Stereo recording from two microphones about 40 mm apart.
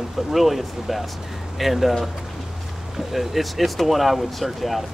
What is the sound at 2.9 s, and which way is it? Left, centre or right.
Speech, centre.